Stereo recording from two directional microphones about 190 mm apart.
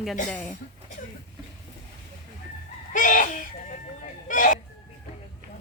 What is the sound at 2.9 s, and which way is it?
Chicken, 45° left (ahead or behind).